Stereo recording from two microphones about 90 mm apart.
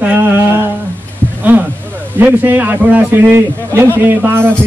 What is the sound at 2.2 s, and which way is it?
A man's voice, 20° right (ahead or behind).